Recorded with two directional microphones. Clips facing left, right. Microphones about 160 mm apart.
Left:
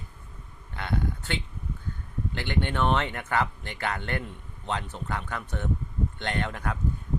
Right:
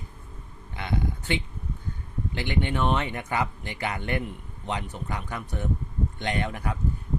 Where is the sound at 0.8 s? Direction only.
15° right (ahead or behind).